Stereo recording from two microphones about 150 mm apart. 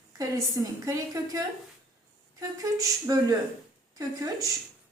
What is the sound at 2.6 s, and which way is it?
A woman's voice, 25° right (ahead or behind).